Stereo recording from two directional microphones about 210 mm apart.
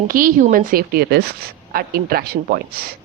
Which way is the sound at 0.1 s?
40° right (ahead or behind).